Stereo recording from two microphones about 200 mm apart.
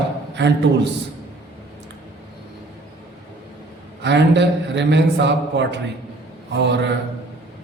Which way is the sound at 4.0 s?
60° right (ahead or behind).